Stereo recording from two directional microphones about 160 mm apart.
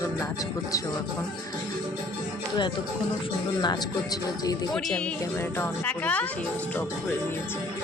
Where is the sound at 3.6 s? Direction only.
25° left (ahead or behind).